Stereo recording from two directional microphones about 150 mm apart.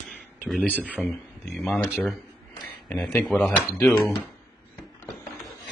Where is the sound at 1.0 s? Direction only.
10° left (ahead or behind).